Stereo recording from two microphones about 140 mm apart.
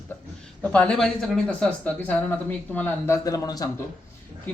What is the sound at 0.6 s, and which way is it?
Speech, 10° left (ahead or behind).